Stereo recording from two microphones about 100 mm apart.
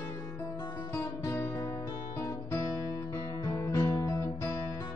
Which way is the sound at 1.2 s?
30° left (ahead or behind).